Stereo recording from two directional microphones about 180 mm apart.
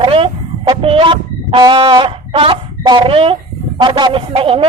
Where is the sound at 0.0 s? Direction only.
30° right (ahead or behind).